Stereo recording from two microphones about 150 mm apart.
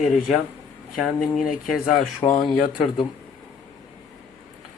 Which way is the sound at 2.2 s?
25° left (ahead or behind).